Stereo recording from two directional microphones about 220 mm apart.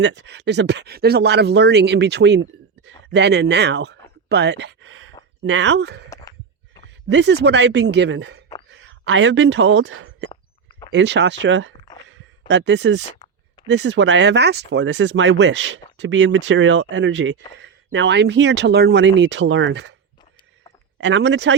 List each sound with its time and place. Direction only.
0.0 s speech: 55° right (ahead or behind)
10.7 s a sound: 20° left (ahead or behind)
10.9 s speech: 50° right (ahead or behind)
21.0 s speech: 55° right (ahead or behind)